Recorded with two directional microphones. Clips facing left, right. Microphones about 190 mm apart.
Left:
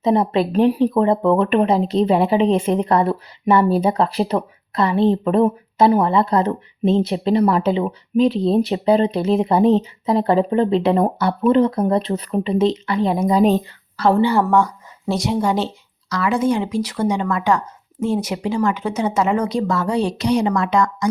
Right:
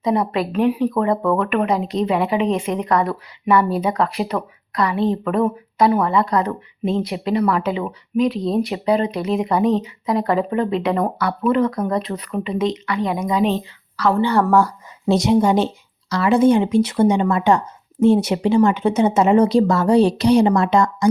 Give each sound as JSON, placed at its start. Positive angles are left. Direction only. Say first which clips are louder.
{"t": 0.0, "sound": "speech", "louder": "left 3 dB", "side_deg": 25}
{"t": 13.9, "sound": "speech", "louder": "left 2 dB", "side_deg": 30}
{"t": 14.3, "sound": "speech", "louder": "right 1 dB", "side_deg": 0}
{"t": 15.0, "sound": "speech", "louder": "right 4 dB", "side_deg": -20}
{"t": 16.0, "sound": "speech", "louder": "right 4 dB", "side_deg": -30}